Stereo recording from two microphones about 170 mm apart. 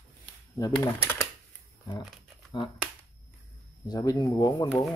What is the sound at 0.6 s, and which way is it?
Speech, 20° left (ahead or behind).